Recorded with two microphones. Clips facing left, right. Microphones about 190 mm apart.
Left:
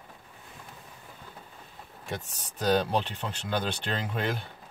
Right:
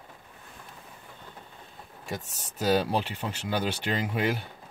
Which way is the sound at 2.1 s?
5° right (ahead or behind).